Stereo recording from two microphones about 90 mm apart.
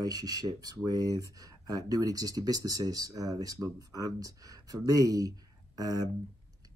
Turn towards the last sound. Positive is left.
turn(degrees=-40)  # may be behind; listen again after turning